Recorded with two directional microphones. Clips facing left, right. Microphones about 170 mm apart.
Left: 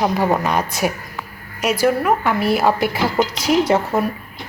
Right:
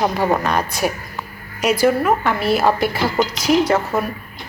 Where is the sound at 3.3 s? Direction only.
30° left (ahead or behind).